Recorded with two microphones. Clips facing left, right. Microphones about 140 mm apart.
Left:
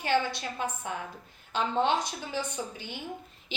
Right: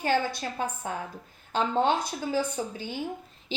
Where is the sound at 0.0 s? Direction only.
45° right (ahead or behind).